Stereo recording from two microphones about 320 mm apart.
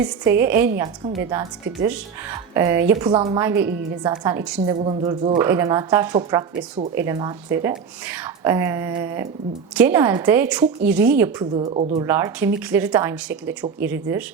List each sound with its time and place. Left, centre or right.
0.0 s speech: centre
4.8 s speech: centre
6.6 s speech: right
6.9 s speech: centre
12.0 s speech: centre